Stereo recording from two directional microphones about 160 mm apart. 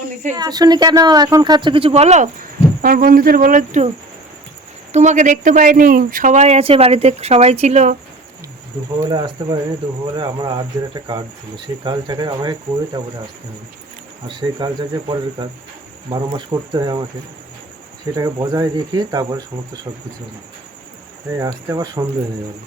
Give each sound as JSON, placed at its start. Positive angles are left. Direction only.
{"t": 0.3, "sound": "speech", "side_deg": -25}
{"t": 9.0, "sound": "cricket", "side_deg": -25}
{"t": 14.3, "sound": "cricket", "side_deg": -30}
{"t": 18.1, "sound": "cricket", "side_deg": -25}
{"t": 21.3, "sound": "cricket", "side_deg": -20}